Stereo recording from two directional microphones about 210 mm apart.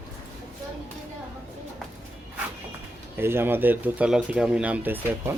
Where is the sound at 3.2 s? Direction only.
10° right (ahead or behind).